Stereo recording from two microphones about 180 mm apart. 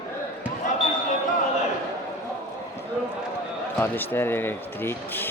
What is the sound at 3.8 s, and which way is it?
Speech, 10° left (ahead or behind).